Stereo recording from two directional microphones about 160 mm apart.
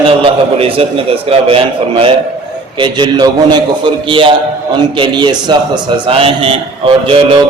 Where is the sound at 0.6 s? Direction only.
35° right (ahead or behind).